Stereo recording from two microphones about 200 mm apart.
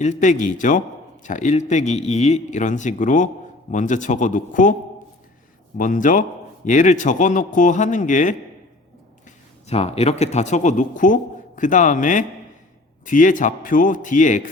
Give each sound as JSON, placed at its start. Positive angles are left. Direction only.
{"t": 0.0, "sound": "a man's voice", "side_deg": 35}
{"t": 9.6, "sound": "a man's voice", "side_deg": 30}